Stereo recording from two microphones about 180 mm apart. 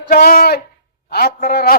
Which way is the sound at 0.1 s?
55° left (ahead or behind).